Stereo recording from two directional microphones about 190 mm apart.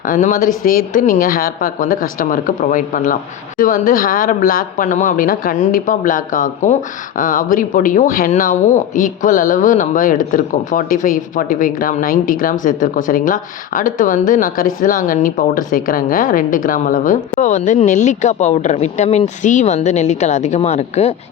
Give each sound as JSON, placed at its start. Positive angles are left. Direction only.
{"t": 0.0, "sound": "speech", "side_deg": 45}